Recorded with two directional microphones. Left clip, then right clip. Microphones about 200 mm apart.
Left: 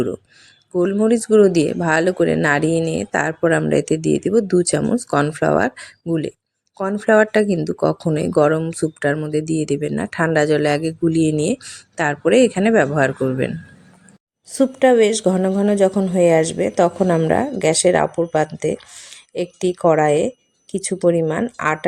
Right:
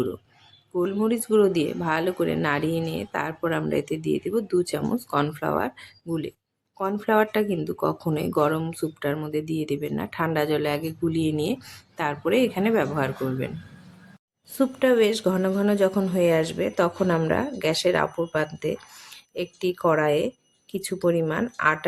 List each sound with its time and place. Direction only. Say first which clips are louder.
0.7 s speech: left 8 dB; 25° left (ahead or behind)
14.5 s speech: left 7 dB; 20° left (ahead or behind)